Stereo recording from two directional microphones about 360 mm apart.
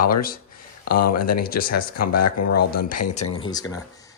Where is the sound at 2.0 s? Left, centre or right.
Left.